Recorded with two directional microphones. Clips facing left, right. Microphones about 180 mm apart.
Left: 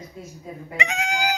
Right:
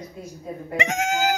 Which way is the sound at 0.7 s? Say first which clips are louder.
Right 3 dB; 50° right (ahead or behind).